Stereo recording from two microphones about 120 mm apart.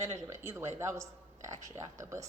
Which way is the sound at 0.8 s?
25° right (ahead or behind).